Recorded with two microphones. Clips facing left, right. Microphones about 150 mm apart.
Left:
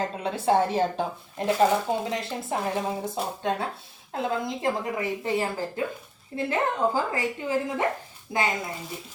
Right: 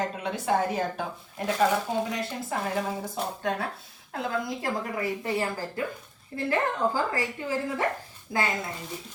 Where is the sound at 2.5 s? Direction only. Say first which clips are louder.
Left 2 dB; 25° left (ahead or behind).